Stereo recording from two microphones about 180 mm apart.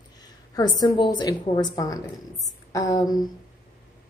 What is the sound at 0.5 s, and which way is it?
A woman's voice, 20° left (ahead or behind).